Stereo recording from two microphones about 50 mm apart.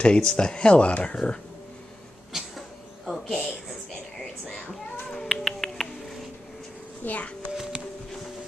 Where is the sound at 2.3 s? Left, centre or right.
Centre.